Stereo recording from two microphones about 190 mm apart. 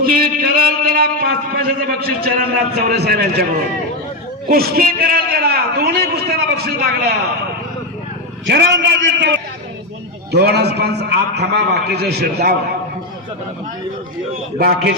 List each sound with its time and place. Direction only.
0.0 s a sound: 50° right (ahead or behind)
4.4 s a man's voice: 50° right (ahead or behind)
8.4 s a man's voice: 65° right (ahead or behind)
10.3 s a man's voice: 60° right (ahead or behind)